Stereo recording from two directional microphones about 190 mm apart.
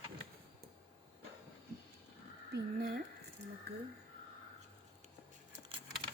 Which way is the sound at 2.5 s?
50° right (ahead or behind).